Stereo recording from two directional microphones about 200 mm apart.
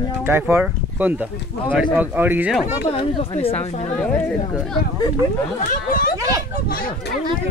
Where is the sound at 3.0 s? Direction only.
25° left (ahead or behind).